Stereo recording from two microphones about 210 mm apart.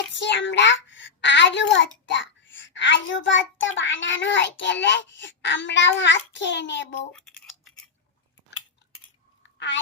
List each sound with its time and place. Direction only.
0.1 s a child's voice: 60° left (ahead or behind)
7.1 s scissors: 5° left (ahead or behind)